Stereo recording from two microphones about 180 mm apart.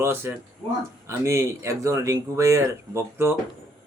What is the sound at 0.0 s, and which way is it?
Speech, 15° right (ahead or behind).